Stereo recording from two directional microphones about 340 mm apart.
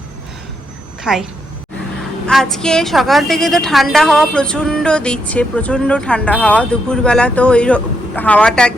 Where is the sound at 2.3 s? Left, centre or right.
Centre.